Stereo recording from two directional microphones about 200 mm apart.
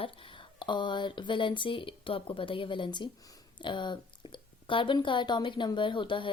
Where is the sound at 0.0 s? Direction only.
25° left (ahead or behind).